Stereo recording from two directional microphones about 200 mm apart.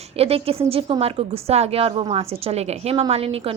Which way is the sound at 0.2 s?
30° right (ahead or behind).